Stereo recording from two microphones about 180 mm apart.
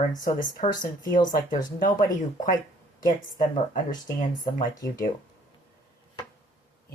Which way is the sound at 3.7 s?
45° left (ahead or behind).